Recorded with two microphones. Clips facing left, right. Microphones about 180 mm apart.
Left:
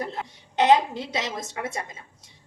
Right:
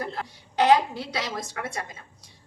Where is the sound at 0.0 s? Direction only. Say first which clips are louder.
Left 1 dB; 20° left (ahead or behind).